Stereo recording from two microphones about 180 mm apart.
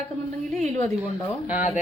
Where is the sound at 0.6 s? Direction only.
40° right (ahead or behind).